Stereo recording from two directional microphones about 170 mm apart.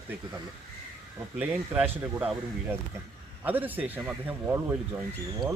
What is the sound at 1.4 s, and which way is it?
Speech, 10° right (ahead or behind).